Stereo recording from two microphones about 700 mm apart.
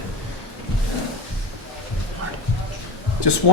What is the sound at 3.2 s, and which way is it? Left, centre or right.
Speech, left.